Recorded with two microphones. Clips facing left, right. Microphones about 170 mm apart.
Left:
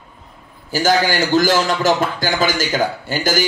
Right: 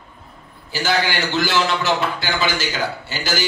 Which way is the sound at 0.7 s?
45° left (ahead or behind).